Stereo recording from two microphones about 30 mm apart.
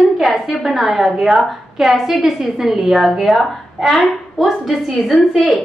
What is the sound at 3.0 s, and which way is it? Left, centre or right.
A woman's voice, centre.